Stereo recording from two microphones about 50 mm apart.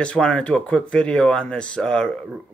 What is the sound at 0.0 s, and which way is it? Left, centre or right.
Speech, centre.